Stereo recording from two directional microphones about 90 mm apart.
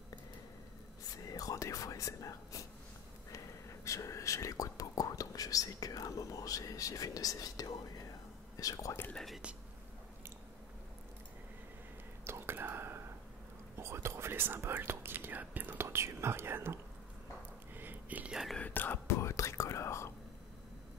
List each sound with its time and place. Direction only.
1.1 s whispering: 40° left (ahead or behind)
3.3 s speech: 35° left (ahead or behind)
9.1 s speech: centre (ahead or behind)
12.3 s whispering: 25° right (ahead or behind)
17.7 s a sound: 20° right (ahead or behind)
18.3 s whispering: centre (ahead or behind)
18.6 s whispering: 20° left (ahead or behind)
19.0 s whispering: 35° left (ahead or behind)